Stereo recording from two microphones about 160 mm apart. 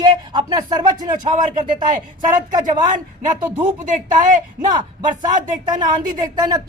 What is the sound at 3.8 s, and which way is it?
Speech, 55° right (ahead or behind).